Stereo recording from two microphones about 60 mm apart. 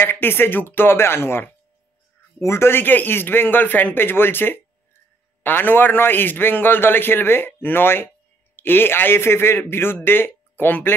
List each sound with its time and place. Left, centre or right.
0.0 s a man's voice: left